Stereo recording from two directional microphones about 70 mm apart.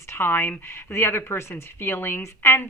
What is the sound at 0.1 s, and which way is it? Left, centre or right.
Speech, left.